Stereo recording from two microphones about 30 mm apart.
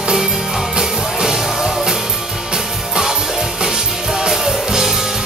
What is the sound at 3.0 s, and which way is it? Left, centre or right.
Music, centre.